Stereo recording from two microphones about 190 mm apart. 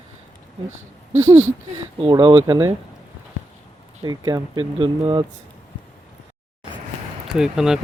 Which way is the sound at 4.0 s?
20° right (ahead or behind).